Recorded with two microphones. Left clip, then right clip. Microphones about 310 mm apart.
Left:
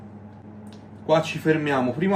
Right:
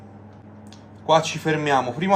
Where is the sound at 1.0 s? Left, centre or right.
Right.